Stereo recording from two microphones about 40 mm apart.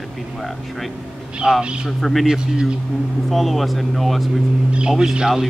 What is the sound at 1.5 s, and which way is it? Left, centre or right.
Speech, centre.